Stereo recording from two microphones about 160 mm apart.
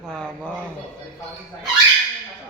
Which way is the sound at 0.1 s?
5° left (ahead or behind).